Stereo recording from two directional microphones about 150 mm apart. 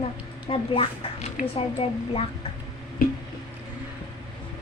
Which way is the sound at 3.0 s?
70° left (ahead or behind).